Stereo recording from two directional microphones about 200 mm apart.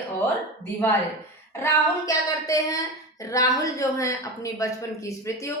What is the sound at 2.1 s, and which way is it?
A woman's voice, 15° left (ahead or behind).